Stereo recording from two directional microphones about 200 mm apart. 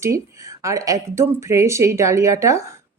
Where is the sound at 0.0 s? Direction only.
15° right (ahead or behind).